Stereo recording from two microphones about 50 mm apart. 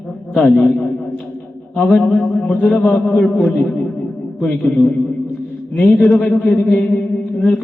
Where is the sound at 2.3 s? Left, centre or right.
Left.